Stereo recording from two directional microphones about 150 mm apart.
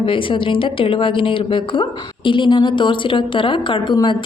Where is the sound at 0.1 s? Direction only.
35° left (ahead or behind).